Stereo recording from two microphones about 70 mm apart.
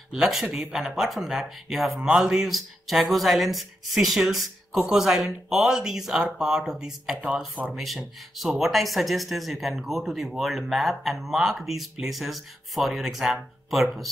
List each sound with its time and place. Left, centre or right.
0.1 s speech: centre
7.2 s speech: centre
7.7 s speech: centre